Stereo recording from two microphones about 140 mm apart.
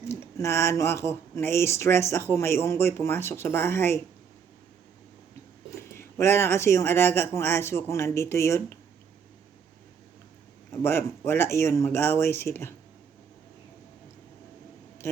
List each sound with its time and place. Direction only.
0.1 s speech: 20° left (ahead or behind)
5.7 s speech: 20° left (ahead or behind)
10.8 s speech: 15° left (ahead or behind)